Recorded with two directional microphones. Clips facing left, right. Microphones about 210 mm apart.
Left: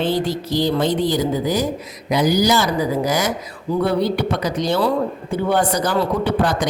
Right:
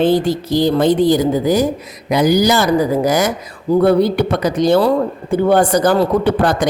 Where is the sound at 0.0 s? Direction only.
50° right (ahead or behind).